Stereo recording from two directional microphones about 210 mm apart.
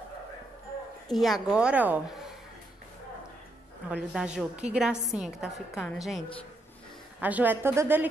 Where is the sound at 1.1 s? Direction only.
Centre (ahead or behind).